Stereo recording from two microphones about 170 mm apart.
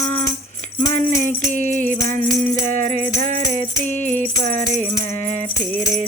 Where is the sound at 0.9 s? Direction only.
20° left (ahead or behind).